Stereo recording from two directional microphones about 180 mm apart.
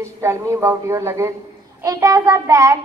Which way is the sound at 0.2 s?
15° right (ahead or behind).